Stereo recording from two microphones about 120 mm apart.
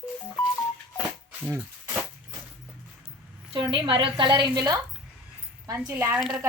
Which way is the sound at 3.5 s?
40° right (ahead or behind).